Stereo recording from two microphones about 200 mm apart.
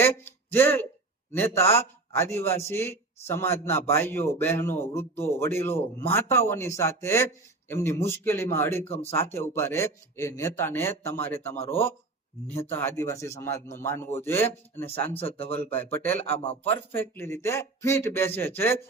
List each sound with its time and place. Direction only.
0.0 s a man's voice: 10° left (ahead or behind)
8.8 s speech: 30° left (ahead or behind)
9.3 s a man's voice: 10° left (ahead or behind)